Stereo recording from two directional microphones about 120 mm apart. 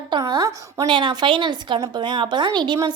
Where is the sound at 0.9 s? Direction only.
45° right (ahead or behind).